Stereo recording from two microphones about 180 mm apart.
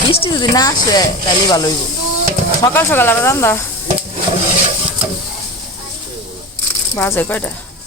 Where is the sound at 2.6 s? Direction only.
10° left (ahead or behind).